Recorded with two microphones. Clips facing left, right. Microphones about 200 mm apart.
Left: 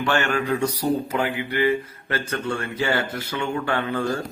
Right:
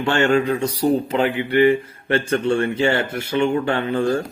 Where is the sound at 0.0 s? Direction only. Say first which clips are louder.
Right 5 dB; 25° right (ahead or behind).